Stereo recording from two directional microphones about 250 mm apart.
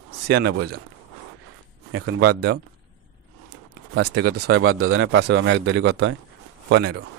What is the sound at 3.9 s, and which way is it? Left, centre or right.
Speech, right.